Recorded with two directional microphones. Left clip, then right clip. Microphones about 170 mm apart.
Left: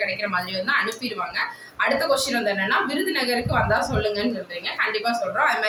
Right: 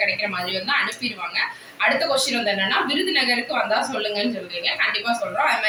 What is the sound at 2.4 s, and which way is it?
Speech, 15° left (ahead or behind).